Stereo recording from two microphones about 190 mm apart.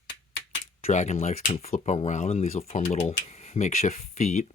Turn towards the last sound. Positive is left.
turn(degrees=40)  # may be behind; listen again after turning